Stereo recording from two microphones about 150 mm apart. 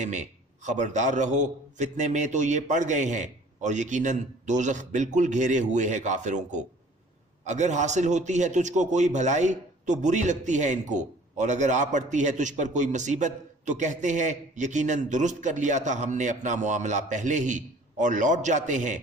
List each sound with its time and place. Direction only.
0.0 s a man's voice: 55° right (ahead or behind)